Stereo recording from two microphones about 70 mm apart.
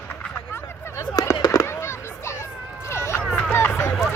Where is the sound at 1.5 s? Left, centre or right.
Left.